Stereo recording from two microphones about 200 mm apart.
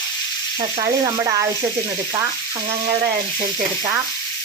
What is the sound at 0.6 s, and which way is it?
Speech, 20° right (ahead or behind).